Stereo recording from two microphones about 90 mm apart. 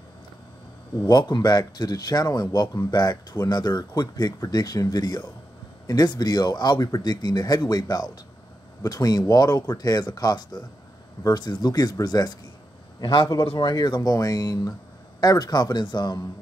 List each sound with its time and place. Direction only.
1.0 s speech: 55° left (ahead or behind)
13.0 s a man's voice: 60° left (ahead or behind)